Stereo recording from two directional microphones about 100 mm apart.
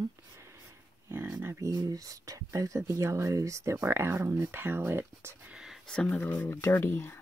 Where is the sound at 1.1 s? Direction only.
25° right (ahead or behind).